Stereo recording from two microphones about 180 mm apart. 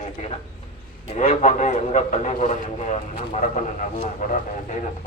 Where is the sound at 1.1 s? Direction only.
35° left (ahead or behind).